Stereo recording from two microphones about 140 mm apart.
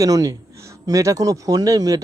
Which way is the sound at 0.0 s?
25° right (ahead or behind).